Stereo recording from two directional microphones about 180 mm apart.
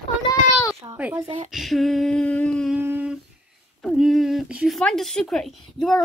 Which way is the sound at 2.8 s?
10° right (ahead or behind).